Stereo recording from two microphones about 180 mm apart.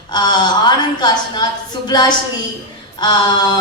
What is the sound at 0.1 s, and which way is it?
A woman's voice, 25° left (ahead or behind).